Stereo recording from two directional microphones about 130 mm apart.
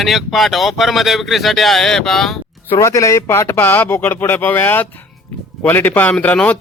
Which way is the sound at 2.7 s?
25° left (ahead or behind).